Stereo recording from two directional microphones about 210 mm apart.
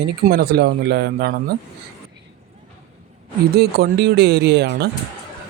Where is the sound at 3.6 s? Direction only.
50° right (ahead or behind).